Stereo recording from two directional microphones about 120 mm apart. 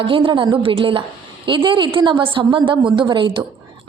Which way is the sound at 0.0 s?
45° right (ahead or behind).